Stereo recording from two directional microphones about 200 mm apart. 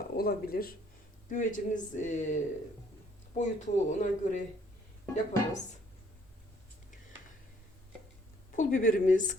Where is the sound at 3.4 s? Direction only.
35° left (ahead or behind).